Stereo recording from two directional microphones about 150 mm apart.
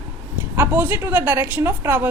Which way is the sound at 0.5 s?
15° right (ahead or behind).